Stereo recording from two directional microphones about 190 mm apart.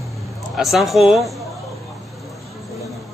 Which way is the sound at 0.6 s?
Centre (ahead or behind).